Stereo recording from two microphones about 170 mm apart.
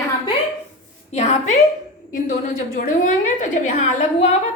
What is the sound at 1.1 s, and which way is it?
A woman's voice, 40° left (ahead or behind).